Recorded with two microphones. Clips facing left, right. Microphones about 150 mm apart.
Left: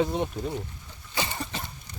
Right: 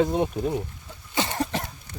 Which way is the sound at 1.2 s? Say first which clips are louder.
Right 7 dB; 75° right (ahead or behind).